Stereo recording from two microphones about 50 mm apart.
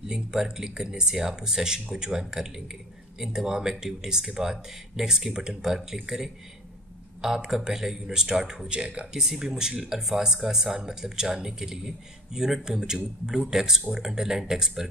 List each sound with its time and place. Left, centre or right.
0.1 s speech: centre
9.2 s speech: centre